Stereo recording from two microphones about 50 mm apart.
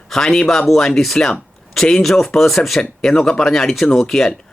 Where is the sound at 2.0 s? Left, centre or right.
Centre.